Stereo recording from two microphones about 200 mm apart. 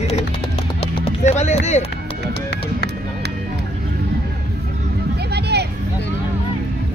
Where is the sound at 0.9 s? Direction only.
30° left (ahead or behind).